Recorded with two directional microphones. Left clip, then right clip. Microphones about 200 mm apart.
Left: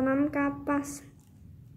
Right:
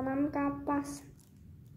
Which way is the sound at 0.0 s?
45° left (ahead or behind).